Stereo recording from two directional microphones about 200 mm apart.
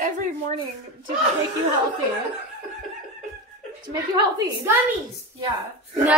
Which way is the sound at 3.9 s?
15° right (ahead or behind).